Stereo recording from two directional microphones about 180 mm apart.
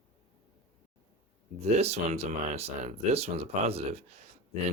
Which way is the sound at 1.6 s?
35° right (ahead or behind).